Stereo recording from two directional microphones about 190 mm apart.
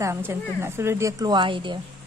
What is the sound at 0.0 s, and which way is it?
A woman's voice, 15° right (ahead or behind).